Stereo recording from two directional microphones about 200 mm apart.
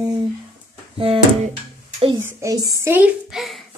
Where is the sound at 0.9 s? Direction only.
30° right (ahead or behind).